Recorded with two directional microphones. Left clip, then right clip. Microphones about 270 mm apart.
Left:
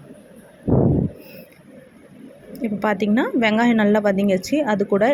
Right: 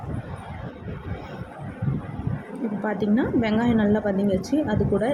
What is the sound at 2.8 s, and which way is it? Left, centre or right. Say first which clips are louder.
A woman's voice: left 5 dB; left.